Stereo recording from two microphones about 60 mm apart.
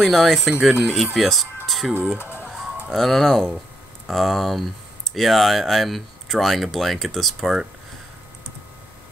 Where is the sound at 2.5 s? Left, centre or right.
Centre.